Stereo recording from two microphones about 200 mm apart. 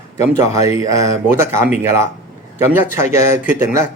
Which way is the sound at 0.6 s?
15° right (ahead or behind).